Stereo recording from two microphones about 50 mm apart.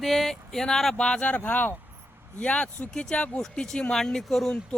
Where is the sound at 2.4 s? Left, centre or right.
Left; by 4.5 s centre.